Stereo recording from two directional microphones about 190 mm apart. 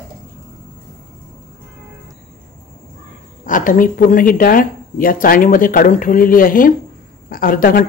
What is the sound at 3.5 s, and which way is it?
Speech, 45° left (ahead or behind).